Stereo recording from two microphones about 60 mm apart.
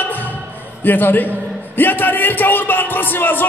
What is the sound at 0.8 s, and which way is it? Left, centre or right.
Speech, left.